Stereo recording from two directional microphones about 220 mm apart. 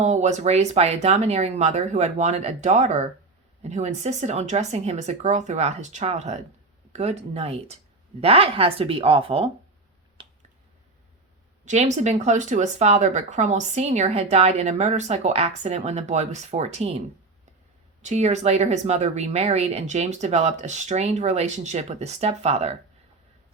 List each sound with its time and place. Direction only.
0.0 s speech: 30° right (ahead or behind)
11.6 s speech: 30° right (ahead or behind)
18.0 s speech: 30° right (ahead or behind)